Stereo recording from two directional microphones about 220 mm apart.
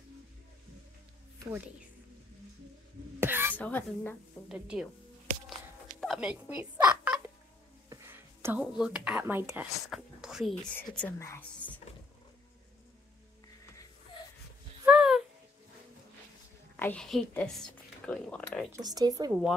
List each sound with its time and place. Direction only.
1.4 s speech: 10° right (ahead or behind)
3.2 s a sound: 10° right (ahead or behind)
3.5 s speech: 10° left (ahead or behind)
4.5 s speech: 5° right (ahead or behind)
5.5 s a sound: centre (ahead or behind)
7.9 s speech: 10° right (ahead or behind); by 11.8 s 10° left (ahead or behind)
14.9 s a sound: 5° right (ahead or behind)
16.7 s a woman's voice: 5° left (ahead or behind)
18.9 s speech: 15° right (ahead or behind)